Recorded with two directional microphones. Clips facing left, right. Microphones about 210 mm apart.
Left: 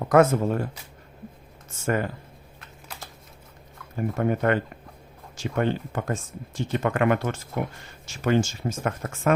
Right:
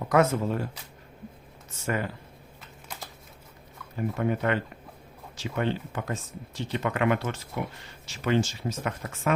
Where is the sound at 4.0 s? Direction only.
45° left (ahead or behind).